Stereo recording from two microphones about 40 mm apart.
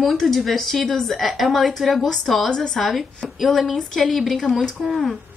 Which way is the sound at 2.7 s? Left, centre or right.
Centre.